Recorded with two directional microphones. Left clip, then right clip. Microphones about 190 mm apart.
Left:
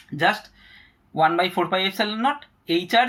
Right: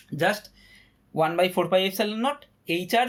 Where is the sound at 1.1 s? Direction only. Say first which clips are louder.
Left 3 dB; 25° right (ahead or behind).